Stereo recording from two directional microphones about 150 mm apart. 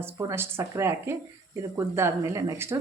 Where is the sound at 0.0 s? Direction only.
15° right (ahead or behind).